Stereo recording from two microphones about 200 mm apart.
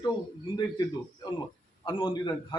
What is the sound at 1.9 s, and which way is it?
Speech, 25° left (ahead or behind).